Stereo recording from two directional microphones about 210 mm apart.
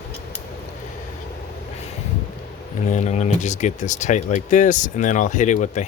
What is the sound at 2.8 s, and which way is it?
Speech, 35° left (ahead or behind).